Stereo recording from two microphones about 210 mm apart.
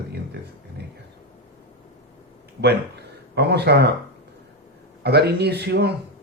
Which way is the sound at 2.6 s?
50° right (ahead or behind).